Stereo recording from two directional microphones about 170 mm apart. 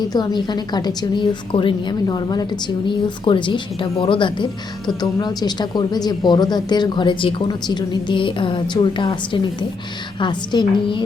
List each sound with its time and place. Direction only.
0.1 s speech: 25° left (ahead or behind)